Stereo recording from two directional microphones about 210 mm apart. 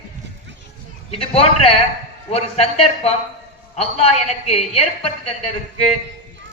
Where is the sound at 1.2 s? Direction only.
25° left (ahead or behind).